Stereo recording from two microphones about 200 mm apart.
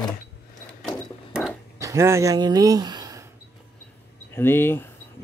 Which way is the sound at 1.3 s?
Centre (ahead or behind).